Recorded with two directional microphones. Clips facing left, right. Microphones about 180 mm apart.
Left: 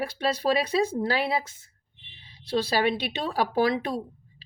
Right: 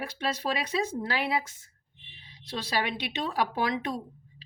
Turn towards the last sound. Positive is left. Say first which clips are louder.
# left 4 dB
turn(degrees=35)  # may be behind; listen again after turning